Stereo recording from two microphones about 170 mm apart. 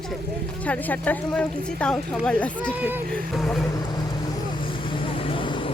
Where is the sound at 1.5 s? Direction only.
60° right (ahead or behind).